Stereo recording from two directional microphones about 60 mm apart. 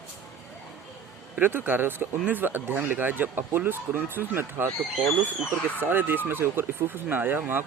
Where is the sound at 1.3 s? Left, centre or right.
Right.